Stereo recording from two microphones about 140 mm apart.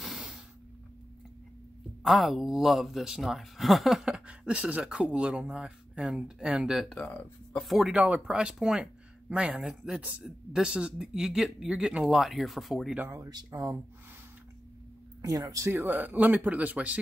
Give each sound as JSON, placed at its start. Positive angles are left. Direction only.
{"t": 0.0, "sound": "hiss", "side_deg": 0}
{"t": 2.0, "sound": "speech", "side_deg": 0}
{"t": 7.0, "sound": "speech", "side_deg": 10}
{"t": 7.6, "sound": "speech", "side_deg": 0}
{"t": 13.0, "sound": "speech", "side_deg": -20}
{"t": 15.2, "sound": "speech", "side_deg": -25}